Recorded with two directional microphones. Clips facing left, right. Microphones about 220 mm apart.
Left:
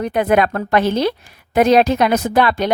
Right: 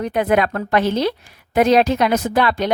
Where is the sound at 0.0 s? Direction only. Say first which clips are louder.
Left 2 dB; 50° left (ahead or behind).